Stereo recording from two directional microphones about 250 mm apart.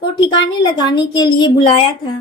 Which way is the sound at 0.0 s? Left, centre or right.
Centre.